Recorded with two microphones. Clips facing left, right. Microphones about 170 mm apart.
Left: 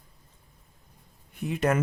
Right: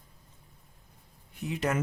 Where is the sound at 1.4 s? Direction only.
55° left (ahead or behind).